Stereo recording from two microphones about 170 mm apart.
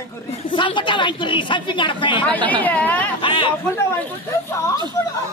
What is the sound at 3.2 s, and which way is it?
Speech, 30° left (ahead or behind).